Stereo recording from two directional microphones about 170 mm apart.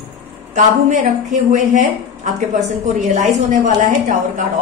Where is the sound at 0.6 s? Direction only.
45° right (ahead or behind).